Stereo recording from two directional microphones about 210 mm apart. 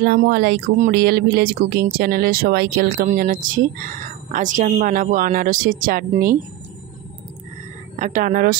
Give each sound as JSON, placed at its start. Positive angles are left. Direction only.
{"t": 0.0, "sound": "speech", "side_deg": -50}
{"t": 7.9, "sound": "speech", "side_deg": -35}